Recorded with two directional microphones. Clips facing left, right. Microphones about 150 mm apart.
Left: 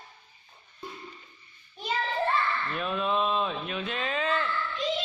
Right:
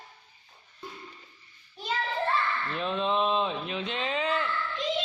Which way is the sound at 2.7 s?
25° right (ahead or behind).